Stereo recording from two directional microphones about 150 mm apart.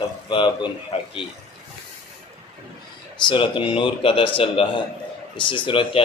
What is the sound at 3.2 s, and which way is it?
A man's voice, 35° left (ahead or behind).